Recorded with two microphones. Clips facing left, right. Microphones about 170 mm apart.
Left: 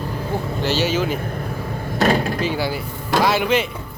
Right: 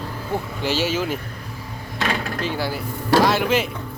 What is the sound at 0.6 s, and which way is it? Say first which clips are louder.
Speech: left 3 dB; 10° right (ahead or behind).